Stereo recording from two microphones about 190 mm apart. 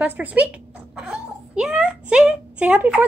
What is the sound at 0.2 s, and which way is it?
Speech, 10° right (ahead or behind).